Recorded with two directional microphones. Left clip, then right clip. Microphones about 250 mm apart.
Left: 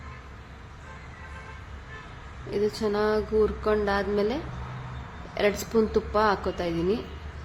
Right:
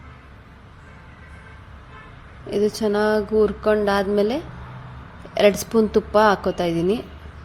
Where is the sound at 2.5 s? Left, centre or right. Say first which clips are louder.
Right 6 dB; right.